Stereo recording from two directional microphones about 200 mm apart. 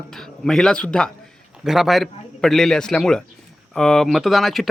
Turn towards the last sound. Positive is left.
turn(degrees=0)  # may be behind; listen again after turning